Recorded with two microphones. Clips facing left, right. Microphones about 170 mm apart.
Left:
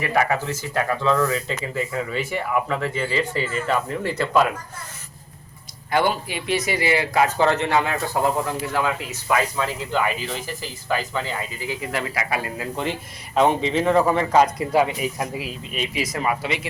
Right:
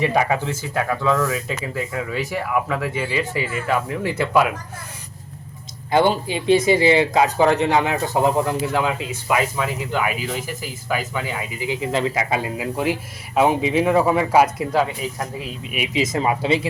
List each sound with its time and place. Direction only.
0.0 s speech: 15° right (ahead or behind)
5.9 s speech: 25° right (ahead or behind)
12.7 s speech: 10° right (ahead or behind)
14.7 s speech: 10° left (ahead or behind)
15.9 s speech: 25° right (ahead or behind)